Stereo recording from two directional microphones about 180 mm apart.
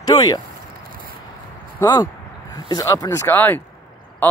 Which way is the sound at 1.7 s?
20° left (ahead or behind).